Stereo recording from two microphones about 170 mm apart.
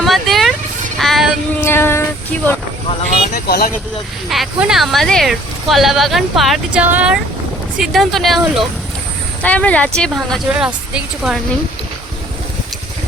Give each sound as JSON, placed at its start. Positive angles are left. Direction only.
{"t": 0.0, "sound": "vehicle", "side_deg": 0}
{"t": 0.9, "sound": "child singing", "side_deg": 0}
{"t": 1.6, "sound": "a sound", "side_deg": 15}
{"t": 3.3, "sound": "speech", "side_deg": 65}
{"t": 4.3, "sound": "speech", "side_deg": 0}
{"t": 9.4, "sound": "speech", "side_deg": 10}
{"t": 10.5, "sound": "speech", "side_deg": -5}